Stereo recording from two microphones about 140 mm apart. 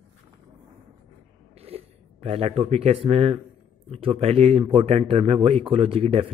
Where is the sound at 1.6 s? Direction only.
45° right (ahead or behind).